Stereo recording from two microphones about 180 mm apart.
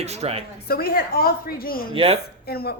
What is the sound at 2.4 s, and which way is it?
Speech, 60° left (ahead or behind).